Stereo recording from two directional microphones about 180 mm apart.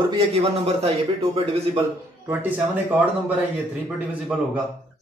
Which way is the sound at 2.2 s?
10° right (ahead or behind).